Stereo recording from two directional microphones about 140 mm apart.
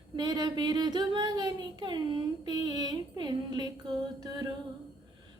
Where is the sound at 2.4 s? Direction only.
30° right (ahead or behind).